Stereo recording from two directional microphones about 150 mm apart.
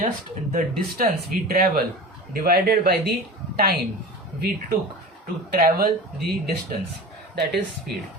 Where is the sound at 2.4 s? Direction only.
90° right.